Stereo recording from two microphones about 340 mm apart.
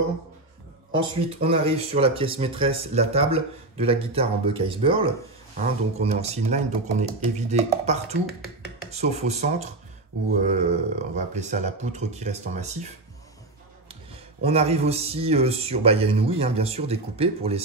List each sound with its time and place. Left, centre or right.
0.9 s a man's voice: centre
13.8 s a man's voice: centre